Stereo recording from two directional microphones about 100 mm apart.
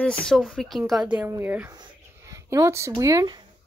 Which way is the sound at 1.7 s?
35° right (ahead or behind).